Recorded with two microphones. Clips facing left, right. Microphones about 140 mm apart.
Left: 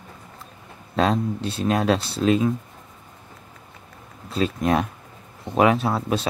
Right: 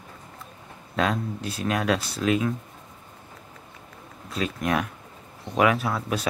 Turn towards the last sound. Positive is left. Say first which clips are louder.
# left 4 dB
turn(degrees=30)  # may be behind; listen again after turning